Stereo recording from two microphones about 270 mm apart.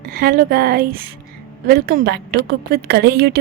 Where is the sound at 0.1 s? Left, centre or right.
Right.